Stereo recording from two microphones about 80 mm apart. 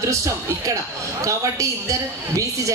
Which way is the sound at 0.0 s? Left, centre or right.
Right.